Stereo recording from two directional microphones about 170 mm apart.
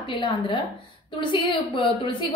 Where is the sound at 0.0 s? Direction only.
30° left (ahead or behind).